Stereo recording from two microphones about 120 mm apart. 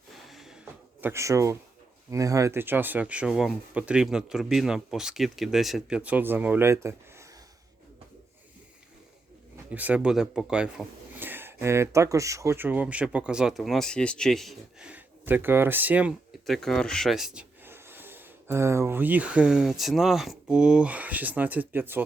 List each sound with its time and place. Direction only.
0.1 s a sound: centre (ahead or behind)
1.0 s speech: 25° right (ahead or behind)
9.7 s speech: 10° right (ahead or behind)
14.8 s speech: 15° right (ahead or behind)
16.5 s speech: 5° left (ahead or behind)
17.7 s speech: 20° right (ahead or behind)